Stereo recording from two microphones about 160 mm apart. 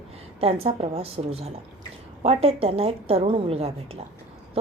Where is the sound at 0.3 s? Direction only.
40° right (ahead or behind).